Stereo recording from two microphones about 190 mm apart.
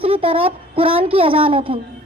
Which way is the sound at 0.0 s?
30° right (ahead or behind).